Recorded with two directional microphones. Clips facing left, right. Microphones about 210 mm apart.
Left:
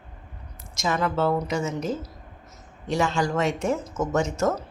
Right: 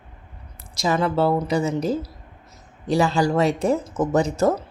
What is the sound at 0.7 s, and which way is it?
Speech, 35° right (ahead or behind).